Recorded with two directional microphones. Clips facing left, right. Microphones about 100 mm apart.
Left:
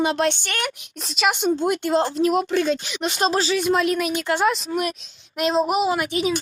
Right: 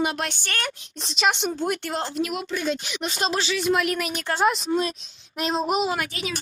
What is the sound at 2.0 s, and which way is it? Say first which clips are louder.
Speech: left 8 dB; 35° left (ahead or behind).